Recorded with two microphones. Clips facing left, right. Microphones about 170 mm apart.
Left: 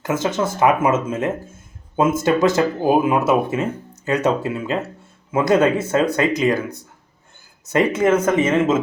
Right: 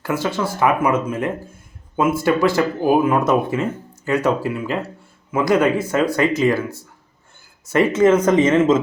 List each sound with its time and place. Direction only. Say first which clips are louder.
0.0 s speech: left 1 dB; 20° left (ahead or behind)